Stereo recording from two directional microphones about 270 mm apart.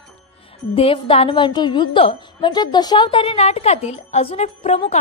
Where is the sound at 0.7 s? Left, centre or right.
Centre.